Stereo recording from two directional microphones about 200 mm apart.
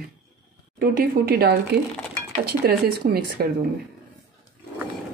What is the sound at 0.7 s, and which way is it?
Speech, 50° right (ahead or behind).